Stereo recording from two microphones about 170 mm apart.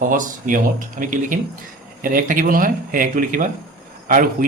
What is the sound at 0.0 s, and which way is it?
Speech, 50° right (ahead or behind).